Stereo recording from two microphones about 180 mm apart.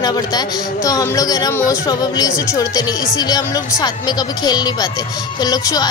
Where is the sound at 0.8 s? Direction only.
20° left (ahead or behind).